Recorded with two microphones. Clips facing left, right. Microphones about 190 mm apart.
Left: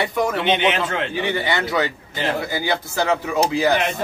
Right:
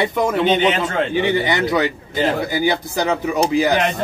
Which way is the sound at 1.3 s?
20° right (ahead or behind).